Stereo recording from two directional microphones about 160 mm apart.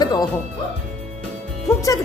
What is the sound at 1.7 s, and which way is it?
Music, 20° left (ahead or behind).